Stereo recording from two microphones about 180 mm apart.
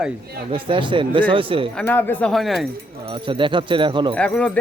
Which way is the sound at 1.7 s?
10° left (ahead or behind).